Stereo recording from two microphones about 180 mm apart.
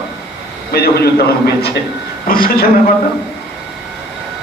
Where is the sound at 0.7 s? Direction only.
60° left (ahead or behind).